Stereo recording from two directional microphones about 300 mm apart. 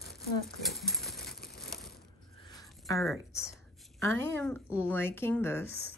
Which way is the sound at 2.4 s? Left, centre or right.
Centre.